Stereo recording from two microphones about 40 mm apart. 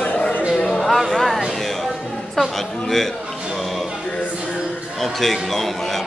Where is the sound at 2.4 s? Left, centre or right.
Centre.